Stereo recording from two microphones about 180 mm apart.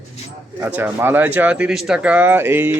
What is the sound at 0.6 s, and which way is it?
Speech, 10° right (ahead or behind).